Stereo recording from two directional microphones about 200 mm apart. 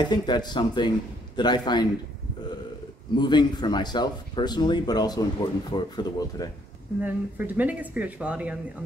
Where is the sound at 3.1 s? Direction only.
20° left (ahead or behind).